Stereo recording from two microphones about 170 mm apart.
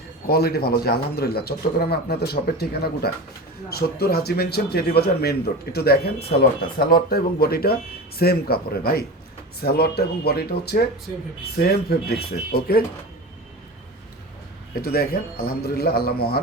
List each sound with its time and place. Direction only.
0.3 s speech: 65° left (ahead or behind)
14.8 s speech: 65° left (ahead or behind)